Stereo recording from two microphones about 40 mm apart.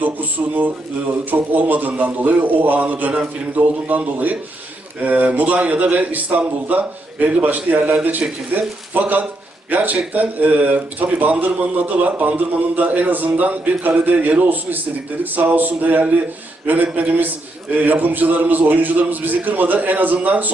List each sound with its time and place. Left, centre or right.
0.0 s a man's voice: right